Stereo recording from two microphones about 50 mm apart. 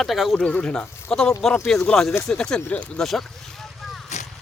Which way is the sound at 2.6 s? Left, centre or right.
Left.